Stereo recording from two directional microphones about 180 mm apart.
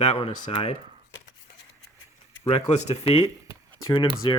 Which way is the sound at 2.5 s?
40° left (ahead or behind).